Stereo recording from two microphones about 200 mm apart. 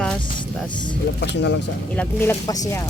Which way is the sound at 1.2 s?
60° left (ahead or behind).